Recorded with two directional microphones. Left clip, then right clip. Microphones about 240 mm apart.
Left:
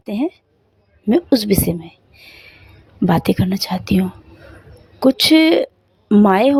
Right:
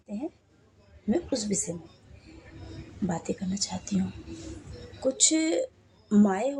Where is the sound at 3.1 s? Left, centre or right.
Left.